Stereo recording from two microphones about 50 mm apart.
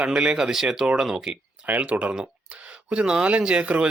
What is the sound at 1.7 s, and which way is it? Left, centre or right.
Speech, right.